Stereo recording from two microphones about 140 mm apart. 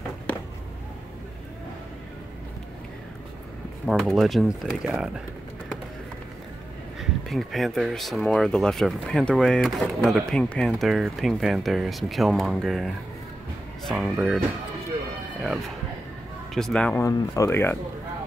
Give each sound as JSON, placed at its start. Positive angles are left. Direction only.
{"t": 3.8, "sound": "speech", "side_deg": 0}
{"t": 7.0, "sound": "speech", "side_deg": 0}
{"t": 16.5, "sound": "speech", "side_deg": 5}
{"t": 16.9, "sound": "speech", "side_deg": 20}